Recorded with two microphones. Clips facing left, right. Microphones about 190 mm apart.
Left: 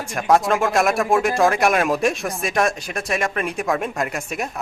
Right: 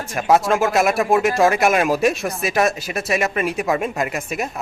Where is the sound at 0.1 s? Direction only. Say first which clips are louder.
Right 1 dB; 5° right (ahead or behind).